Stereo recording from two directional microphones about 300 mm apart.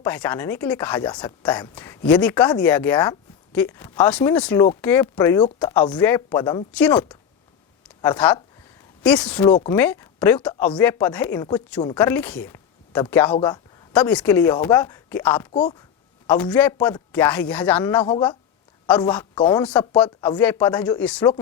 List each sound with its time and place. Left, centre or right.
0.0 s speech: centre
18.0 s speech: centre
18.9 s a man's voice: centre